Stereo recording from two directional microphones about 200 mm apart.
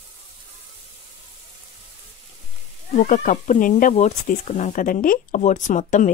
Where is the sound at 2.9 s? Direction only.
40° left (ahead or behind).